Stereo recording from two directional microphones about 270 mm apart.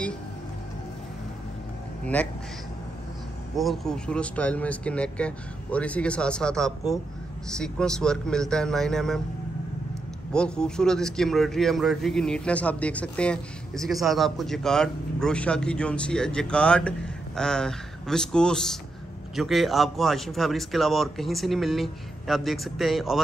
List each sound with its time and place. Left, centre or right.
3.5 s a man's voice: centre
10.3 s a man's voice: centre